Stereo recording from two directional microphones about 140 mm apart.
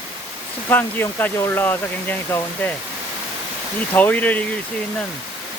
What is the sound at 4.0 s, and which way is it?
Speech, 10° left (ahead or behind).